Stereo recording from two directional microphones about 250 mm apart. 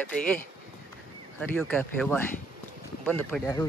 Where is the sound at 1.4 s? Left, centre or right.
Centre.